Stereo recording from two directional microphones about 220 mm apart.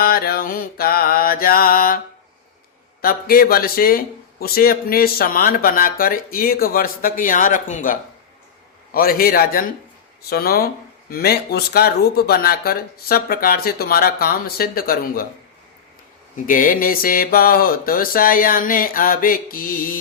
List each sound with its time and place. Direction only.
0.0 s mantra: 45° left (ahead or behind)
3.0 s a man's voice: 40° left (ahead or behind)
16.5 s a man's voice: 40° left (ahead or behind)